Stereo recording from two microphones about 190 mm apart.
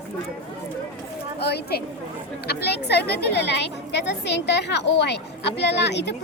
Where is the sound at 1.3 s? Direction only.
60° left (ahead or behind).